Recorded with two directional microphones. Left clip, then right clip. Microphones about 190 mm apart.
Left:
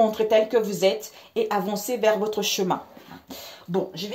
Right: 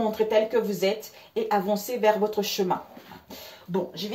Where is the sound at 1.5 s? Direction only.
50° left (ahead or behind).